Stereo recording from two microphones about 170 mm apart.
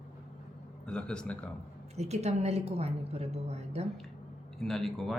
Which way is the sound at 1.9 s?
40° right (ahead or behind).